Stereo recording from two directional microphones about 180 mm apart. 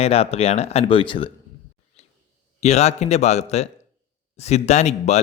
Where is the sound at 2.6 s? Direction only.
40° left (ahead or behind).